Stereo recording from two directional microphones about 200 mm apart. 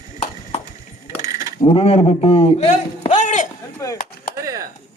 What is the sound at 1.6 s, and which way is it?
A man's voice, 30° left (ahead or behind).